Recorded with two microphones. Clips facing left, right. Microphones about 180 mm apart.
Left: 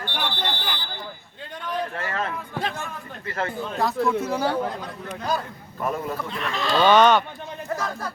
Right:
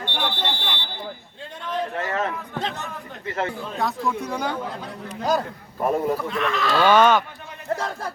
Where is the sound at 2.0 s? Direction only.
20° right (ahead or behind).